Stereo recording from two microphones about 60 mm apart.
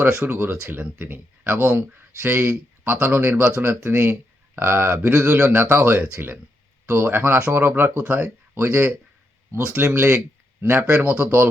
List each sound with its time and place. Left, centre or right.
0.3 s speech: right
9.8 s speech: right